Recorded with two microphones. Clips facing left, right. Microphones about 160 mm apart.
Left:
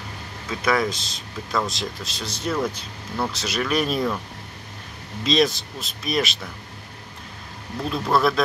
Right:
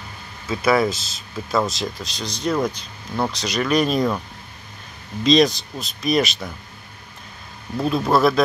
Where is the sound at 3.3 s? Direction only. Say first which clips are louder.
Right 4 dB; 5° left (ahead or behind).